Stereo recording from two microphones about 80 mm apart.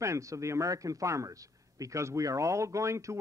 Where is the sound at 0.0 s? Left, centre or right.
Right.